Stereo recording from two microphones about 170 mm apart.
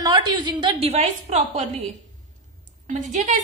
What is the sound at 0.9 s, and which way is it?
Speech, 40° right (ahead or behind).